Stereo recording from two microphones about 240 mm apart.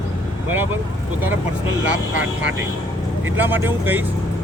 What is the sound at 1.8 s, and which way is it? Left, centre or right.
Speech, right.